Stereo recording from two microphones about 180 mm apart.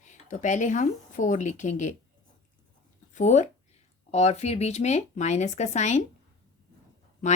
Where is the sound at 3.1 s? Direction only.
40° left (ahead or behind).